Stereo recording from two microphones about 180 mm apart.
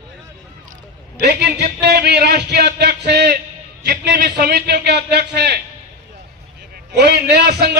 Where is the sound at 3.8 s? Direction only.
65° right (ahead or behind).